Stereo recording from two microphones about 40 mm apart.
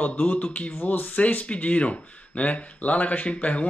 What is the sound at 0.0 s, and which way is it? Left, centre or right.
Speech, left.